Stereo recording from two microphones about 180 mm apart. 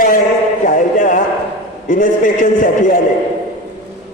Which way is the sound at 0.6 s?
45° left (ahead or behind).